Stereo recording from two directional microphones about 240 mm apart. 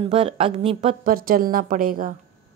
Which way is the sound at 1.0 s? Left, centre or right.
Right.